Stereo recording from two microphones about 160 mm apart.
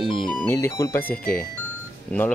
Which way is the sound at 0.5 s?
15° left (ahead or behind).